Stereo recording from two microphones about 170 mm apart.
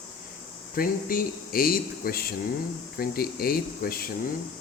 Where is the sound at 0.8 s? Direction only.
55° left (ahead or behind).